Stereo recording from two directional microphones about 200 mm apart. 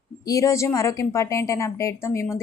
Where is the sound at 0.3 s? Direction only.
15° left (ahead or behind).